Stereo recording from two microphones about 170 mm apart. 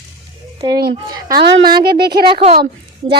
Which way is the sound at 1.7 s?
65° right (ahead or behind).